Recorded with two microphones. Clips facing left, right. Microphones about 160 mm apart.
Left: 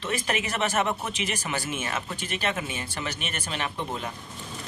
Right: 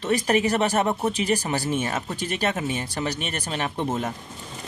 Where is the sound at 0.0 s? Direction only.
40° right (ahead or behind).